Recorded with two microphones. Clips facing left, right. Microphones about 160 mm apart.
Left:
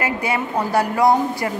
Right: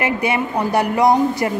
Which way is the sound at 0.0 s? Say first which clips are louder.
Right 3 dB; 20° right (ahead or behind).